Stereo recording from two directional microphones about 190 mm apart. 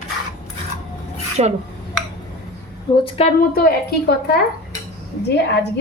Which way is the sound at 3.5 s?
55° left (ahead or behind).